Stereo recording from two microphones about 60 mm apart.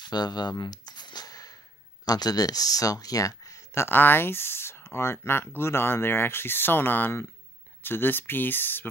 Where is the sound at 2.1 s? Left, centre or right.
Left.